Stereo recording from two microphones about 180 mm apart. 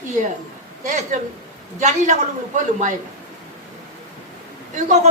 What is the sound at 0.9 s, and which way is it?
A man's voice, 45° right (ahead or behind).